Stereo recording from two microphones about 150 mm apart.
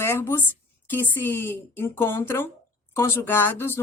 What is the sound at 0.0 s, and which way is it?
Speech, 15° left (ahead or behind).